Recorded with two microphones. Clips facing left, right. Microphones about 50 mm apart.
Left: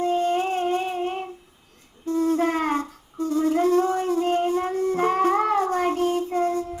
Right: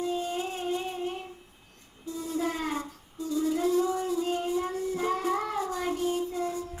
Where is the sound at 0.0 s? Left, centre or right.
Left.